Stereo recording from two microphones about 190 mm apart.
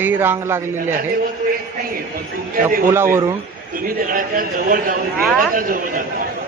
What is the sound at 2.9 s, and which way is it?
Speech, 15° right (ahead or behind).